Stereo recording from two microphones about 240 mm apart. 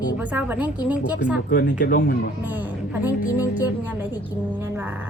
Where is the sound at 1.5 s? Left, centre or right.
Left.